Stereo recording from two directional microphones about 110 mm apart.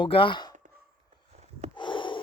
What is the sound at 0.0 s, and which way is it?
Speech, 50° left (ahead or behind).